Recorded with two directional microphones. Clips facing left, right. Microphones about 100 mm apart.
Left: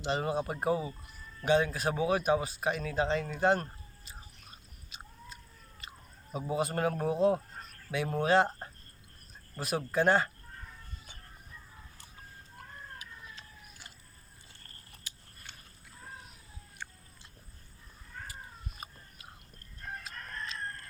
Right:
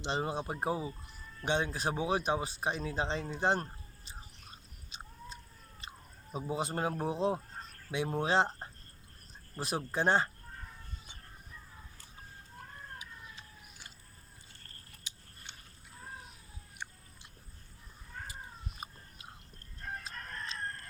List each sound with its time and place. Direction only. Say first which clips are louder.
0.0 s speech: left 3 dB; 25° right (ahead or behind)
4.9 s cat: right 2 dB; 30° right (ahead or behind)
5.8 s chewing: right 1 dB; 25° right (ahead or behind)
6.3 s speech: left 3 dB; 25° right (ahead or behind)
9.6 s speech: left 4 dB; 30° right (ahead or behind)
13.0 s a sound: left 1 dB; 20° right (ahead or behind)
15.1 s a sound: even; 20° right (ahead or behind)